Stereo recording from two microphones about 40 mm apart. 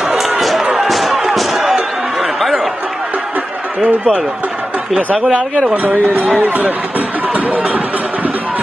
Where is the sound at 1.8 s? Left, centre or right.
Centre.